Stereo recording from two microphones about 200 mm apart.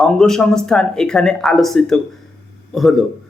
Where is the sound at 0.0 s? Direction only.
5° left (ahead or behind).